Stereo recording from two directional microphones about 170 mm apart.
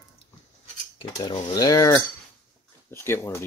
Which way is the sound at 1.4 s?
20° left (ahead or behind).